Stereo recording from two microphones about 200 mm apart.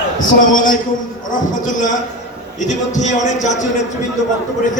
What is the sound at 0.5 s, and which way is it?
A man's voice, 40° left (ahead or behind).